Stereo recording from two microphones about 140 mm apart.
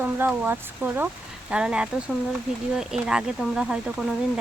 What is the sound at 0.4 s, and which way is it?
Speech, 15° right (ahead or behind).